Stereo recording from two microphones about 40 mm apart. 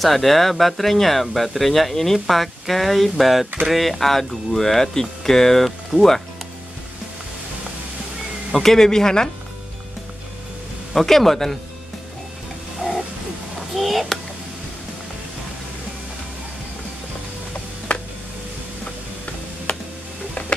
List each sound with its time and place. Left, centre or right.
0.0 s speech: centre
5.9 s speech: centre
8.5 s speech: centre
10.9 s speech: centre
12.8 s a sound: centre
13.6 s speech: centre
17.9 s music: left
20.4 s a sound: left